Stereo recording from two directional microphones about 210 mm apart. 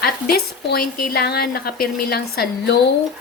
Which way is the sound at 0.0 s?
45° left (ahead or behind).